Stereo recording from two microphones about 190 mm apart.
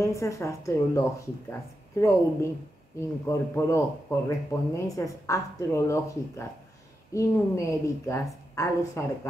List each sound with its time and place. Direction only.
0.0 s speech: 15° left (ahead or behind)